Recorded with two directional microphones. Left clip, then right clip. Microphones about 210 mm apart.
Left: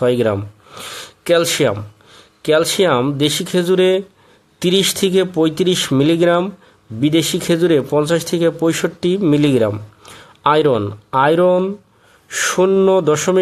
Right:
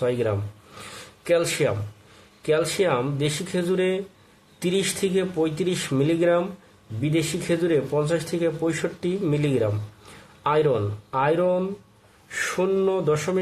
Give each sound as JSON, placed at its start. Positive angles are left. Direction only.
{"t": 0.0, "sound": "a man's voice", "side_deg": 40}